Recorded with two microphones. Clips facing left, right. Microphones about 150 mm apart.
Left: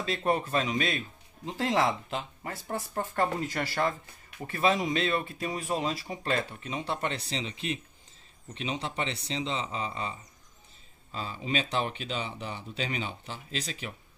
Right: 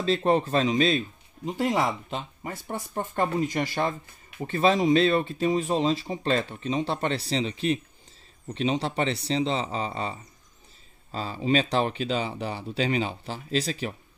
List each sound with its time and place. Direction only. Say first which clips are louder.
0.0 s speech: right 6 dB; 30° right (ahead or behind)
1.4 s speech: right 2 dB; 15° right (ahead or behind)
4.4 s speech: right 5 dB; 30° right (ahead or behind)